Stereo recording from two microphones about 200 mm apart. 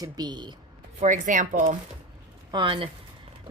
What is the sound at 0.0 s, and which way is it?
Speech, 20° right (ahead or behind).